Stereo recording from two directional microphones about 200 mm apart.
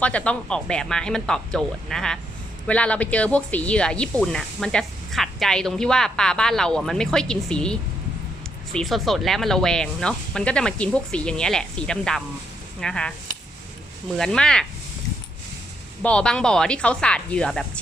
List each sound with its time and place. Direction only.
0.0 s speech: 5° left (ahead or behind)
14.2 s speech: 5° left (ahead or behind)
16.0 s speech: 5° left (ahead or behind)